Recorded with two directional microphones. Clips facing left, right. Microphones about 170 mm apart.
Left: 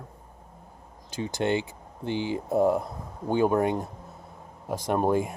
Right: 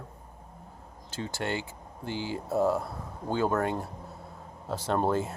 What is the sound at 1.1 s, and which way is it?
Speech, 15° left (ahead or behind).